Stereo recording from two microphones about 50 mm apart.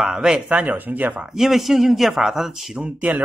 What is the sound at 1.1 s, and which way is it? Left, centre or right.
Speech, right.